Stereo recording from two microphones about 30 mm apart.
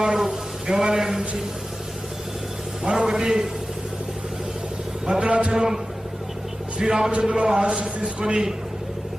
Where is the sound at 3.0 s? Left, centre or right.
Centre.